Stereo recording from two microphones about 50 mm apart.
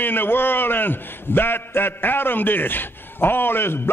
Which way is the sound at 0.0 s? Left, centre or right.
Left.